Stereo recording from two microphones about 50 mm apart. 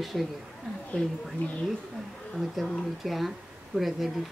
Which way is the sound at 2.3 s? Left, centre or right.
Centre.